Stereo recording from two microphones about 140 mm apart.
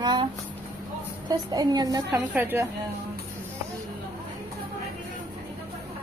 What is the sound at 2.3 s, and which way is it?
Speech, 15° right (ahead or behind).